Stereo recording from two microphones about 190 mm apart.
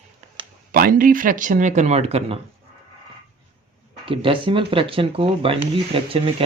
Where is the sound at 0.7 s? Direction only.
45° right (ahead or behind).